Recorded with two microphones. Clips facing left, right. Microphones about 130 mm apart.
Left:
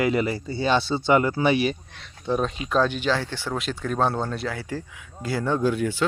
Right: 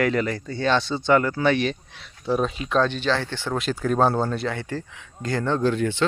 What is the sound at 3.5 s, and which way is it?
Speech, centre (ahead or behind).